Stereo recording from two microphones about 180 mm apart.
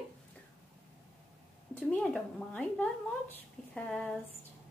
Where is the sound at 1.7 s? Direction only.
10° left (ahead or behind).